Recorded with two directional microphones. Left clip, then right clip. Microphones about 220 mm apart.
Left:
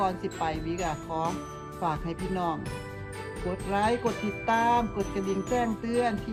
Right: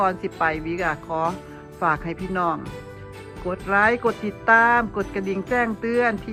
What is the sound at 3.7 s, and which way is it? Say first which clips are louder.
Speech: right 8 dB; centre (ahead or behind).